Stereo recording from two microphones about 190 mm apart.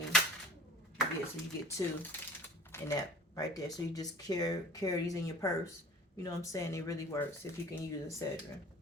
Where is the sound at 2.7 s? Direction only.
20° left (ahead or behind).